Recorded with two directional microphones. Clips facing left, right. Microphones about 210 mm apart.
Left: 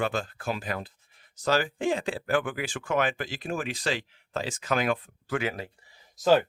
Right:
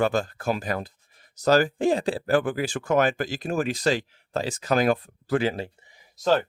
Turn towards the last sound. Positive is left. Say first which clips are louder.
# left 1 dB
turn(degrees=5)  # may be behind; listen again after turning